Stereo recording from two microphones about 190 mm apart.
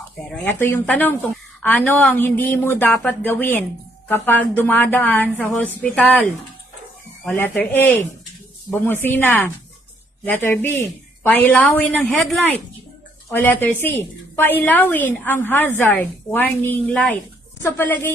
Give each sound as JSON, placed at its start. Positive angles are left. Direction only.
{"t": 0.4, "sound": "a woman's voice", "side_deg": 10}
{"t": 7.3, "sound": "a woman's voice", "side_deg": 10}